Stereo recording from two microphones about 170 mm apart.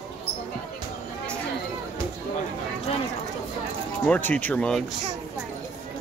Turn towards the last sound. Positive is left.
turn(degrees=5)  # may be behind; listen again after turning